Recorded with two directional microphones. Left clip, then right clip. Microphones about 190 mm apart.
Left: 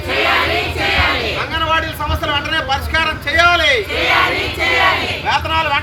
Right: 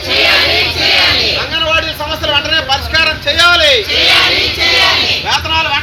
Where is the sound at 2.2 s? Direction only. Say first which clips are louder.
Right 6 dB; 25° left (ahead or behind).